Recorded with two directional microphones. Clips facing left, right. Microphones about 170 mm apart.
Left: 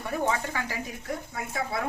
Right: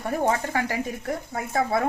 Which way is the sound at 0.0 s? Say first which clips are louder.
Right 4 dB; 45° right (ahead or behind).